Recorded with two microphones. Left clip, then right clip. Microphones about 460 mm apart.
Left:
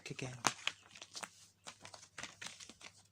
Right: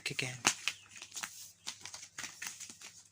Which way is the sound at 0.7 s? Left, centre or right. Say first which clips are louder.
Right 3 dB; left.